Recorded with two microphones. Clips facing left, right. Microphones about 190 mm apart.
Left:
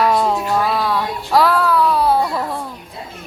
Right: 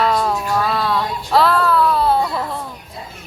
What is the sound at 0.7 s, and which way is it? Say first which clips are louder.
Child singing: left 1 dB; 10° left (ahead or behind).